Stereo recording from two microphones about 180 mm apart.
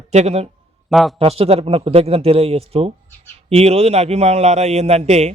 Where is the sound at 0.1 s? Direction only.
35° right (ahead or behind).